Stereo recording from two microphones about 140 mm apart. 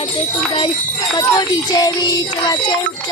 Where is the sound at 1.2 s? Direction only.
30° left (ahead or behind).